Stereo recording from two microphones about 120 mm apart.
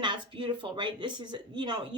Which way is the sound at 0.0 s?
40° right (ahead or behind).